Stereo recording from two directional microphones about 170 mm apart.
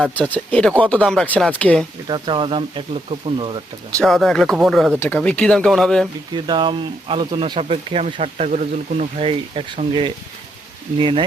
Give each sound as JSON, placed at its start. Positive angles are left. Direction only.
{"t": 0.2, "sound": "speech", "side_deg": 10}
{"t": 2.0, "sound": "speech", "side_deg": -25}
{"t": 4.0, "sound": "speech", "side_deg": 5}
{"t": 6.3, "sound": "speech", "side_deg": -25}